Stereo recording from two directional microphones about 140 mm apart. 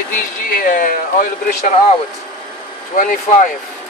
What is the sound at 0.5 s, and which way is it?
Speech, 85° left.